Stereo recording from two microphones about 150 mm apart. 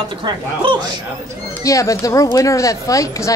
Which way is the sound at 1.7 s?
20° left (ahead or behind).